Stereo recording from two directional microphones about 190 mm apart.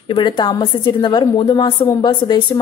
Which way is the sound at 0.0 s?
25° left (ahead or behind).